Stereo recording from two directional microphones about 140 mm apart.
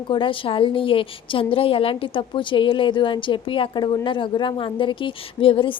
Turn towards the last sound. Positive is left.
turn(degrees=40)  # may be behind; listen again after turning